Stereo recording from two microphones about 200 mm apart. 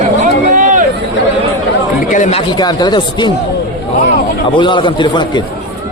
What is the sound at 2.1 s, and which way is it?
Speech, 40° left (ahead or behind).